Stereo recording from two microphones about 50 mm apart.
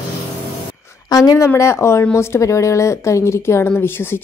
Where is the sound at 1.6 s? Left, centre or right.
Left.